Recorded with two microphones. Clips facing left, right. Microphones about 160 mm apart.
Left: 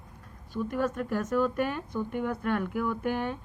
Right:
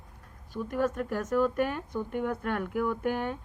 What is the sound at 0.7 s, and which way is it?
A woman's voice, 45° right (ahead or behind).